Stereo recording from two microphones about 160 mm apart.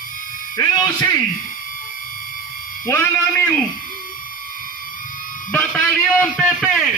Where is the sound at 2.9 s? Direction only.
15° left (ahead or behind).